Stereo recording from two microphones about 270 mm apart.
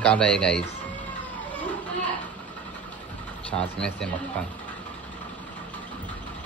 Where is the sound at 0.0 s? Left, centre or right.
Centre.